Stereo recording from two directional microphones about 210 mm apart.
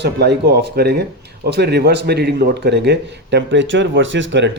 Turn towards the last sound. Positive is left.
turn(degrees=-60)  # may be behind; listen again after turning